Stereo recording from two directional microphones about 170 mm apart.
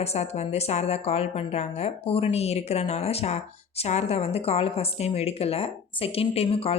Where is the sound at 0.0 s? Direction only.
40° left (ahead or behind).